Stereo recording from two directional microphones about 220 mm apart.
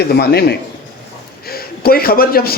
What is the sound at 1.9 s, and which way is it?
Speech, 45° left (ahead or behind).